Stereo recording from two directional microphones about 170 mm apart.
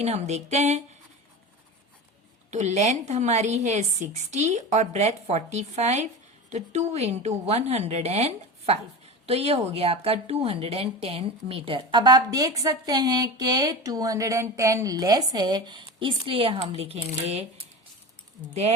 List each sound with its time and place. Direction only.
0.0 s a woman's voice: 40° right (ahead or behind)
2.5 s a woman's voice: 40° right (ahead or behind)